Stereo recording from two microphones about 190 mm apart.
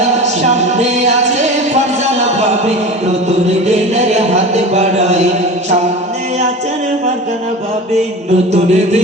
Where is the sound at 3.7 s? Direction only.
35° right (ahead or behind).